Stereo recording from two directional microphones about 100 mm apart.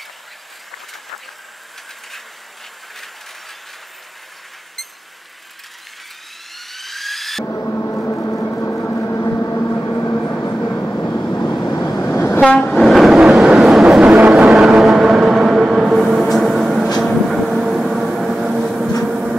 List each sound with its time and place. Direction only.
6.5 s a sound: centre (ahead or behind)
7.4 s gong: 25° left (ahead or behind)
10.5 s vehicle: 15° left (ahead or behind)
11.6 s vehicle: 25° left (ahead or behind)
12.3 s train: 5° left (ahead or behind)
17.0 s vehicle: centre (ahead or behind)